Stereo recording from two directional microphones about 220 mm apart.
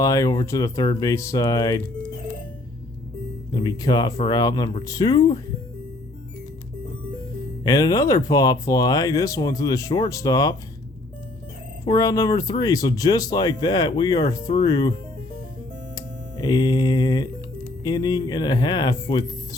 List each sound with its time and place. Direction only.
0.0 s speech: 15° left (ahead or behind)
3.5 s speech: 20° left (ahead or behind)
7.6 s speech: 15° left (ahead or behind)
11.9 s speech: 15° left (ahead or behind)
16.0 s speech: 15° left (ahead or behind)